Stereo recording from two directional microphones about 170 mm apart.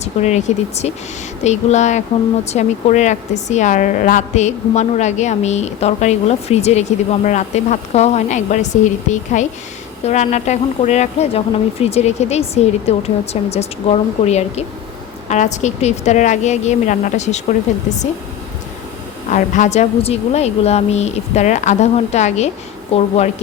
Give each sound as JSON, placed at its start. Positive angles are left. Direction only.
{"t": 0.0, "sound": "a woman's voice", "side_deg": 40}
{"t": 19.3, "sound": "a woman's voice", "side_deg": 45}